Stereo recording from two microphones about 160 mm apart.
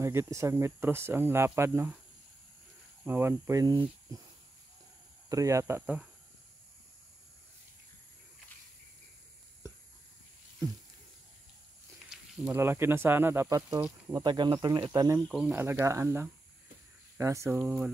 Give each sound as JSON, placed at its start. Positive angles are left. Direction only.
{"t": 0.0, "sound": "speech", "side_deg": -15}
{"t": 3.0, "sound": "speech", "side_deg": -15}
{"t": 5.3, "sound": "speech", "side_deg": -20}
{"t": 12.1, "sound": "speech", "side_deg": -15}
{"t": 14.1, "sound": "speech", "side_deg": -30}
{"t": 15.1, "sound": "speech", "side_deg": 5}
{"t": 15.5, "sound": "speech", "side_deg": -15}